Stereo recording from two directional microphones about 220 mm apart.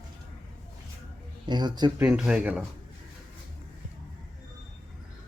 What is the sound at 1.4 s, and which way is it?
Speech, 20° right (ahead or behind).